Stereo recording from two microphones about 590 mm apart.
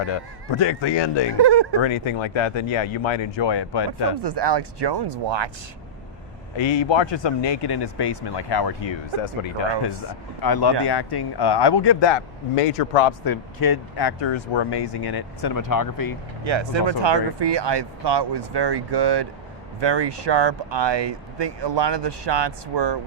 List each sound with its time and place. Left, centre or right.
0.0 s speech: left
1.4 s speech: right
1.8 s speech: left
4.2 s speech: right
6.6 s speech: left
10.4 s speech: left
13.2 s speech: left
16.4 s speech: right